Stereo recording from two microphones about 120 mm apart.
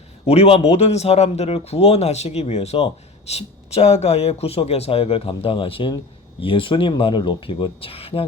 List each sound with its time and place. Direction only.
0.3 s speech: 55° left (ahead or behind)